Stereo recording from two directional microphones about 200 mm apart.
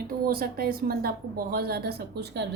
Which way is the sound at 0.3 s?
50° right (ahead or behind).